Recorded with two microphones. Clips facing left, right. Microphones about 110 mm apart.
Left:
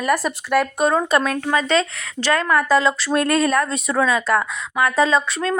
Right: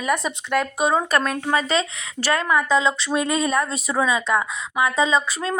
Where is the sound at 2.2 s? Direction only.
10° right (ahead or behind).